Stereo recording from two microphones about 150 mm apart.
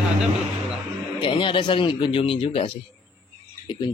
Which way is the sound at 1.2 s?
35° left (ahead or behind).